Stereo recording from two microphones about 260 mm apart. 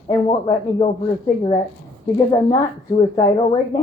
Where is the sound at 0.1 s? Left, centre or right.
Centre.